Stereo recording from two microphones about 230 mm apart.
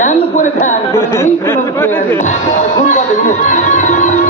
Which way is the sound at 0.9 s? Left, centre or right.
Centre.